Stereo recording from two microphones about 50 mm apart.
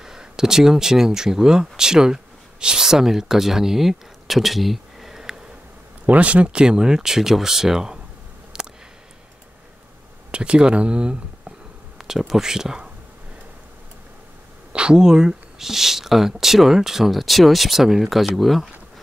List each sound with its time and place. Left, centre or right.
0.0 s speech: centre
6.0 s speech: right
8.5 s a sound: centre
10.3 s speech: centre
12.0 s speech: centre
14.7 s speech: centre